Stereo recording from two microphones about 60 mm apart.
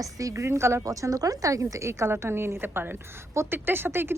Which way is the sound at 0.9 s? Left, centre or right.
Right.